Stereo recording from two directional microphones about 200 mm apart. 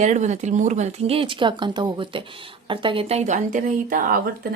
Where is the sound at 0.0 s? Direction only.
35° right (ahead or behind).